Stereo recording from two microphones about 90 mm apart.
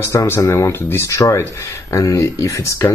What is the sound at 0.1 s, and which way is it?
Speech, 35° left (ahead or behind).